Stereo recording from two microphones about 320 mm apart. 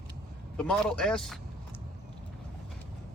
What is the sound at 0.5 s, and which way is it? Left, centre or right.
Speech, centre.